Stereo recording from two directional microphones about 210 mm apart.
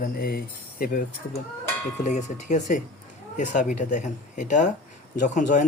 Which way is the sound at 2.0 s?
35° left (ahead or behind).